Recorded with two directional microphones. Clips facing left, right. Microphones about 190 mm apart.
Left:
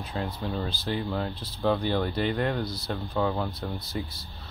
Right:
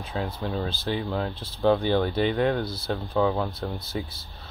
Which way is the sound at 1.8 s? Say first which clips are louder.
Right 4 dB; centre (ahead or behind).